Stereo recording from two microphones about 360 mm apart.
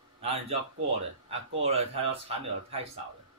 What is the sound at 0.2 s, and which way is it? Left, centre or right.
A man's voice, centre.